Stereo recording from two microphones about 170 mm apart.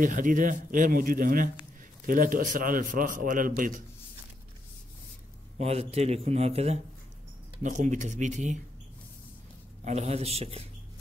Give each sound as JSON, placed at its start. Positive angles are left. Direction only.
{"t": 0.0, "sound": "a man's voice", "side_deg": -50}
{"t": 5.6, "sound": "a man's voice", "side_deg": -40}
{"t": 9.8, "sound": "speech", "side_deg": -40}